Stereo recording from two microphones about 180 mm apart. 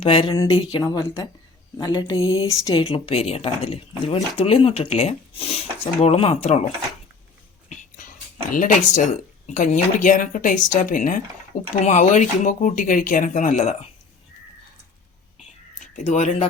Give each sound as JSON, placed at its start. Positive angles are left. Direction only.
{"t": 0.0, "sound": "speech", "side_deg": 30}
{"t": 2.8, "sound": "speech", "side_deg": 30}
{"t": 7.7, "sound": "whispering", "side_deg": 45}
{"t": 8.4, "sound": "speech", "side_deg": 45}
{"t": 15.8, "sound": "speech", "side_deg": 40}